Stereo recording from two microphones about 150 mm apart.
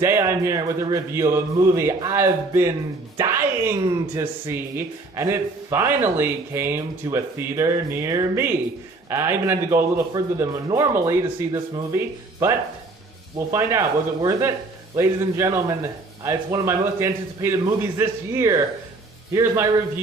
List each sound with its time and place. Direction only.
0.0 s a man's voice: 15° right (ahead or behind)